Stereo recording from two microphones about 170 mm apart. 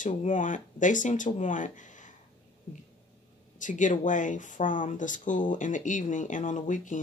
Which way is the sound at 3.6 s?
50° left (ahead or behind).